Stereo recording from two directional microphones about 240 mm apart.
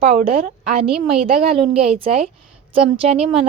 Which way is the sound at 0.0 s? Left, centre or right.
Right.